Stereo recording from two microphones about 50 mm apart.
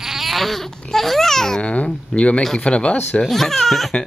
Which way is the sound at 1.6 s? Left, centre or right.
Left.